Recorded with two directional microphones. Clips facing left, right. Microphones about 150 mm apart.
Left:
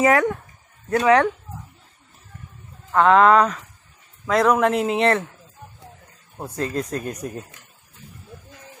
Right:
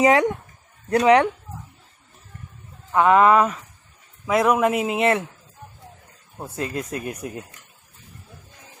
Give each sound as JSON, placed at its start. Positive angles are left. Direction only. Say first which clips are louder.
{"t": 0.0, "sound": "a man's voice", "louder": "right 1 dB", "side_deg": -15}
{"t": 2.9, "sound": "a man's voice", "louder": "left 1 dB", "side_deg": -5}
{"t": 6.6, "sound": "a man's voice", "louder": "left 2 dB", "side_deg": -10}